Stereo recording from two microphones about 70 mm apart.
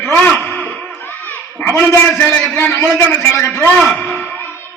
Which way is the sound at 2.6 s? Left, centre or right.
Left.